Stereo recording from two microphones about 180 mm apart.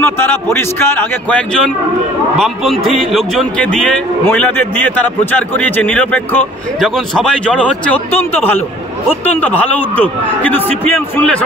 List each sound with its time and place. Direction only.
0.0 s a man's voice: 10° left (ahead or behind)